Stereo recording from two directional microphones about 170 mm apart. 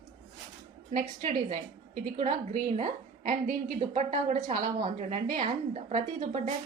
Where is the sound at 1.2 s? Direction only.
45° right (ahead or behind).